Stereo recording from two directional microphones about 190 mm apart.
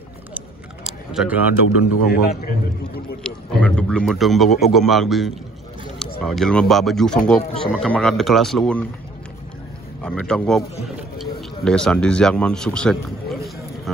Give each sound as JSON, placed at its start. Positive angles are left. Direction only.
{"t": 0.8, "sound": "a sound", "side_deg": -5}
{"t": 2.0, "sound": "a man's voice", "side_deg": 55}
{"t": 3.3, "sound": "speech", "side_deg": 5}
{"t": 10.0, "sound": "speech", "side_deg": 5}